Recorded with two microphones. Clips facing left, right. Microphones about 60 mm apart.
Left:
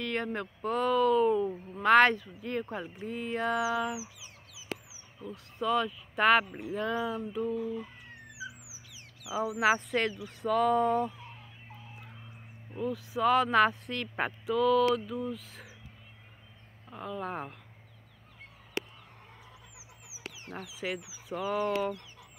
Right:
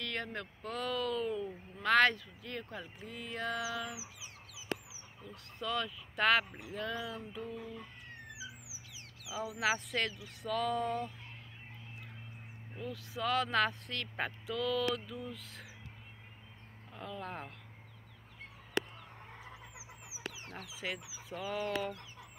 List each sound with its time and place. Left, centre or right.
0.0 s speech: left
5.3 s speech: left
7.1 s speech: centre
9.4 s speech: left
12.7 s speech: centre
16.9 s speech: centre
20.5 s speech: centre